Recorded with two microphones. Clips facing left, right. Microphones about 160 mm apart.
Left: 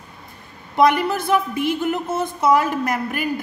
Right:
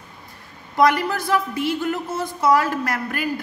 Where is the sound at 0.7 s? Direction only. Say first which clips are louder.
Left 2 dB; 20° left (ahead or behind).